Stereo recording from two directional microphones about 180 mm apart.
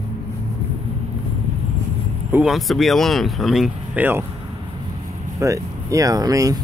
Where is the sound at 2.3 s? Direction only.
Centre (ahead or behind).